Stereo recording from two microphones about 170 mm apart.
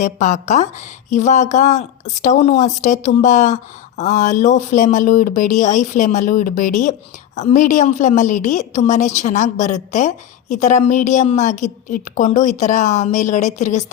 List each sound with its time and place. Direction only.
0.0 s a woman's voice: 45° left (ahead or behind)